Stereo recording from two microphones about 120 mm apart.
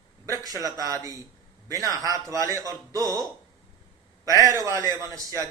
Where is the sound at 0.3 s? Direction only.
30° right (ahead or behind).